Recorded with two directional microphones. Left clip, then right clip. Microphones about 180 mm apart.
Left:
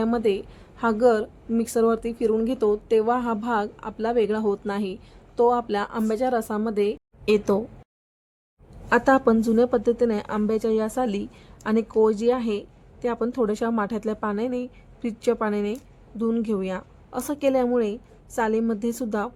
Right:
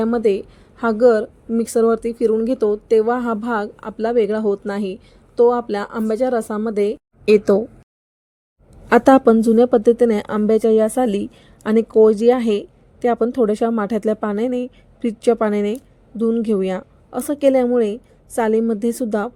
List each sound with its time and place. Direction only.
0.0 s speech: 25° right (ahead or behind)
8.9 s a woman's voice: 35° right (ahead or behind)